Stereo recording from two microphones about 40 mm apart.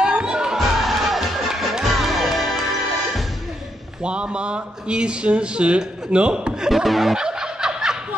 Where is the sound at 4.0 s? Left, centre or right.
Right.